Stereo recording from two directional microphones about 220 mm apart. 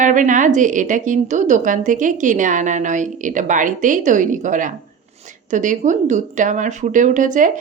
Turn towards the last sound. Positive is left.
turn(degrees=-35)  # may be behind; listen again after turning